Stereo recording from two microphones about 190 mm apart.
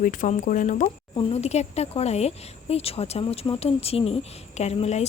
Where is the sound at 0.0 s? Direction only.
45° left (ahead or behind).